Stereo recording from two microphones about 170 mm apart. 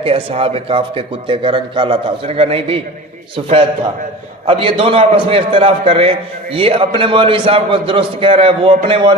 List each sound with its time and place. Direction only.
0.0 s a man's voice: 35° right (ahead or behind)